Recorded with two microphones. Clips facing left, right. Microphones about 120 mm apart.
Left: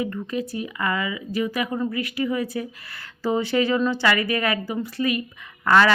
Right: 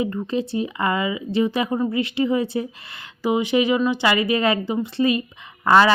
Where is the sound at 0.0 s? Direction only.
25° right (ahead or behind).